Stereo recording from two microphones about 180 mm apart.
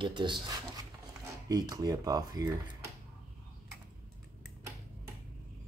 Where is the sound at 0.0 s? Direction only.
25° right (ahead or behind).